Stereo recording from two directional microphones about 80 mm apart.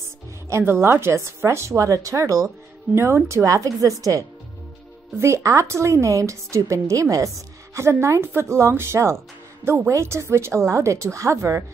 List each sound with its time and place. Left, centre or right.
0.5 s speech: right
5.2 s speech: right